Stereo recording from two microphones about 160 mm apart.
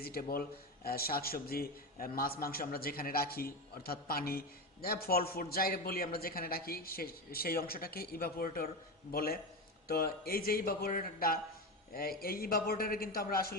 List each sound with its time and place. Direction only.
0.0 s a man's voice: 70° left (ahead or behind)